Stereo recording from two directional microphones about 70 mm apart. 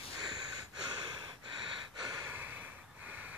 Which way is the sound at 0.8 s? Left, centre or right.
Right.